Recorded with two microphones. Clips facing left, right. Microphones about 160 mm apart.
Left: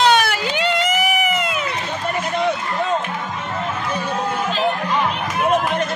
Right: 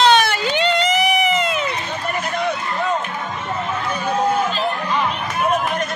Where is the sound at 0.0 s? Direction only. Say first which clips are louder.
Right 1 dB; 10° left (ahead or behind).